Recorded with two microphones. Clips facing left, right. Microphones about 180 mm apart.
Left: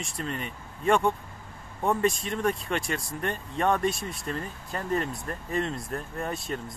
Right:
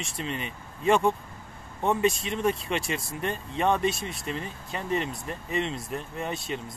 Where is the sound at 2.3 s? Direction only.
25° right (ahead or behind).